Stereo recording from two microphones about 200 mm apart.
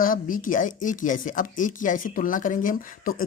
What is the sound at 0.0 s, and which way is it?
Speech, 45° left (ahead or behind).